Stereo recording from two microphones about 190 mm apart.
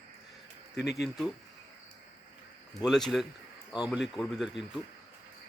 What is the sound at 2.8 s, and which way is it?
Speech, centre (ahead or behind).